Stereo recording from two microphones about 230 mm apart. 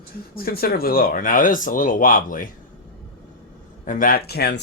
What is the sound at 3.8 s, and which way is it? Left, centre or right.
Speech, left.